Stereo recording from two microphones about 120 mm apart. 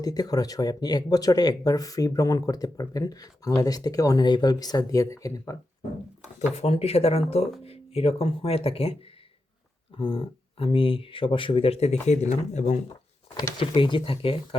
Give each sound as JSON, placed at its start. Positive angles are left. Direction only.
{"t": 0.0, "sound": "speech", "side_deg": 30}
{"t": 6.6, "sound": "speech", "side_deg": 55}
{"t": 12.0, "sound": "speech", "side_deg": 70}
{"t": 13.6, "sound": "speech", "side_deg": 45}